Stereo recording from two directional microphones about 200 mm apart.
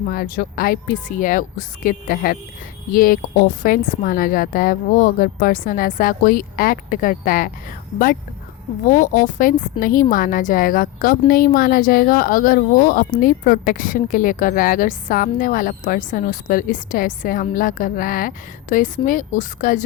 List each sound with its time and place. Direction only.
0.1 s a woman's voice: 45° left (ahead or behind)